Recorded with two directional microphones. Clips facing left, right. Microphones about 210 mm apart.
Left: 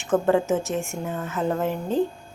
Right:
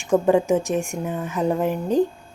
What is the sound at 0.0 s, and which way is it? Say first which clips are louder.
A woman's voice: right 3 dB; 15° right (ahead or behind).